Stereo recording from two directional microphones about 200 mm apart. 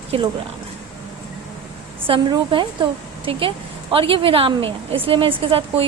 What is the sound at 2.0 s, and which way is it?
Speech, 25° right (ahead or behind).